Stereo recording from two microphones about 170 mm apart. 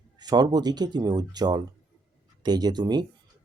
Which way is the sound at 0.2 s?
25° right (ahead or behind).